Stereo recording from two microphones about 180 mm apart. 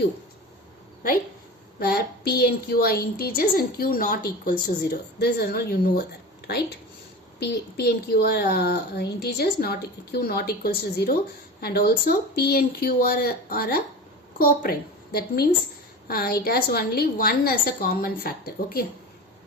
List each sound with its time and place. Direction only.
1.8 s a woman's voice: 60° left (ahead or behind)
7.3 s a woman's voice: 65° left (ahead or behind)